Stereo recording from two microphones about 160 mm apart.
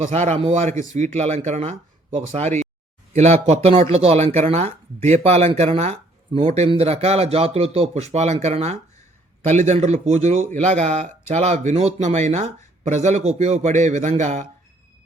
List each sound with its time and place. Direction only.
0.1 s speech: 45° right (ahead or behind)